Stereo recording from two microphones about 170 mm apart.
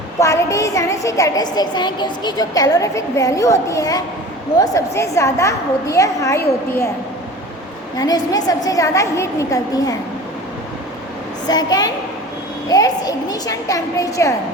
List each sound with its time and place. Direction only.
0.2 s a woman's voice: 20° left (ahead or behind)
7.9 s a woman's voice: 20° left (ahead or behind)
11.4 s a woman's voice: 25° left (ahead or behind)